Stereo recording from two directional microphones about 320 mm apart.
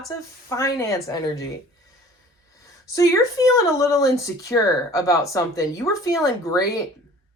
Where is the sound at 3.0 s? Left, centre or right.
Centre.